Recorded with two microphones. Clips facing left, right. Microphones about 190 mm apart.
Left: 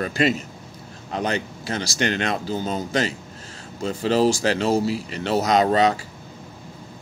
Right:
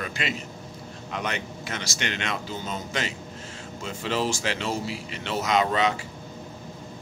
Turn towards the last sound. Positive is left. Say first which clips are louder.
# left 5 dB
turn(degrees=40)  # may be behind; listen again after turning